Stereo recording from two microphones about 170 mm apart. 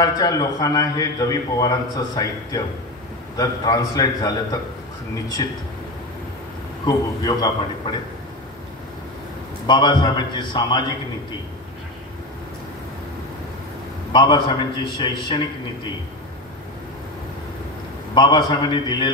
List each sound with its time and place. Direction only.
0.0 s a man's voice: 20° left (ahead or behind)
6.9 s a man's voice: 20° left (ahead or behind)
9.7 s a man's voice: 25° left (ahead or behind)
14.1 s a man's voice: 25° left (ahead or behind)
18.1 s a man's voice: 25° left (ahead or behind)